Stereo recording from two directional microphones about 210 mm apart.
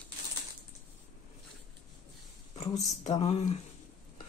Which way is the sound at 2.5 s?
30° left (ahead or behind).